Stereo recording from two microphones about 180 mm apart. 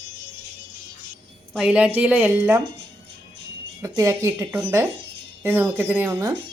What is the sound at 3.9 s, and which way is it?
A woman's voice, 15° right (ahead or behind).